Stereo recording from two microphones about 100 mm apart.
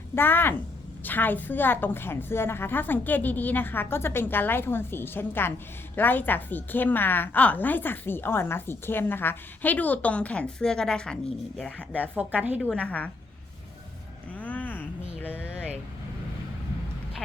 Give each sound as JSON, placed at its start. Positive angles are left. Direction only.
{"t": 0.2, "sound": "a woman's voice", "side_deg": 20}
{"t": 12.1, "sound": "a woman's voice", "side_deg": -15}
{"t": 12.5, "sound": "a woman's voice", "side_deg": 15}
{"t": 14.3, "sound": "a sound", "side_deg": 15}